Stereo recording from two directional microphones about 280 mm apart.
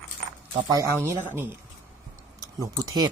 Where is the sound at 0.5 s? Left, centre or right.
Centre.